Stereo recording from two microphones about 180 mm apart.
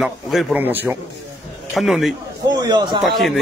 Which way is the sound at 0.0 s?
Centre (ahead or behind).